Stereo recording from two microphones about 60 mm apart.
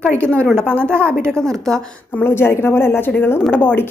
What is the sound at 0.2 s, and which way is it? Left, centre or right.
Speech, left.